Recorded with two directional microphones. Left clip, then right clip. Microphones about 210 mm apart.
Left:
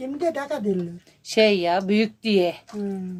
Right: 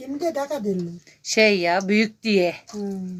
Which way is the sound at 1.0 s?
Centre (ahead or behind).